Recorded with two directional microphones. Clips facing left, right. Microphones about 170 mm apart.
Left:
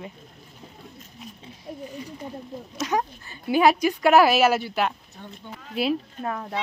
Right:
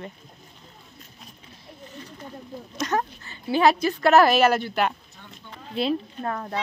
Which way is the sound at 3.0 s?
15° left (ahead or behind).